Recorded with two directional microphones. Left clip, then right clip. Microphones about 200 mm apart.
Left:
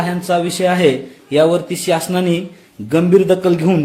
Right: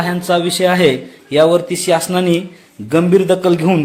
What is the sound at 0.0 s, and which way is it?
A man's voice, 10° left (ahead or behind).